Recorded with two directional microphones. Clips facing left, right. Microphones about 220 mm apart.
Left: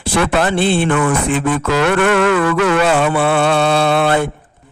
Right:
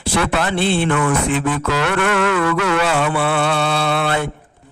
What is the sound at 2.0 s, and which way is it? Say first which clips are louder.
Music: left 4 dB; 40° left (ahead or behind).